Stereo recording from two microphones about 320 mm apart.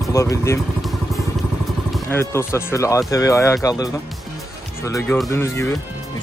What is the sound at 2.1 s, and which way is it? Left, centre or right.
Speech, centre.